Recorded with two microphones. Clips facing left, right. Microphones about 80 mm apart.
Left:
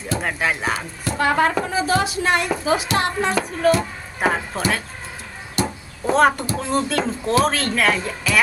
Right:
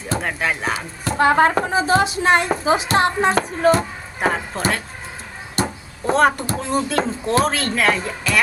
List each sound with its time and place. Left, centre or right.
0.2 s speech: centre
1.2 s speech: right
4.2 s speech: centre
5.6 s a sound: centre
6.6 s speech: centre